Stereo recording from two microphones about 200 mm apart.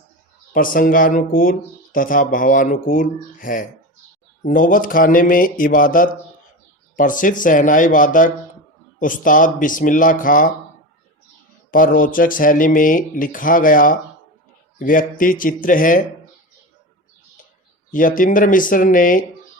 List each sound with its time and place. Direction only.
0.5 s speech: 45° left (ahead or behind)
11.7 s speech: 45° left (ahead or behind)
17.9 s speech: 40° left (ahead or behind)